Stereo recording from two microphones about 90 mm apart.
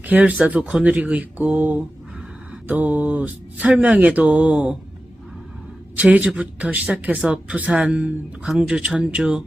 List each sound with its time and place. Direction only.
0.0 s speech: 15° right (ahead or behind)
6.0 s speech: 15° right (ahead or behind)